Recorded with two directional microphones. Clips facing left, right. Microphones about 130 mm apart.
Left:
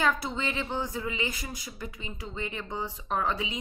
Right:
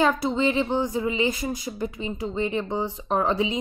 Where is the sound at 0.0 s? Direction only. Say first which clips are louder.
Right 7 dB; 25° right (ahead or behind).